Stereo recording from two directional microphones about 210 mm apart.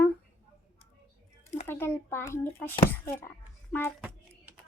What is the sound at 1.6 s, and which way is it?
A child's voice, 10° left (ahead or behind).